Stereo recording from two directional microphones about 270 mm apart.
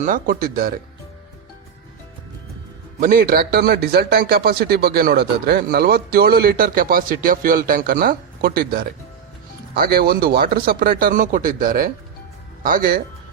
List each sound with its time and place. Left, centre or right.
0.0 s a man's voice: right
3.0 s a man's voice: right